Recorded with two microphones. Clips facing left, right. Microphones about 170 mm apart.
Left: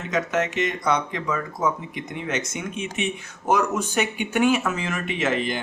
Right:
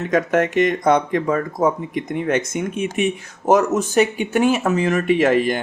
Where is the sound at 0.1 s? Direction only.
50° right (ahead or behind).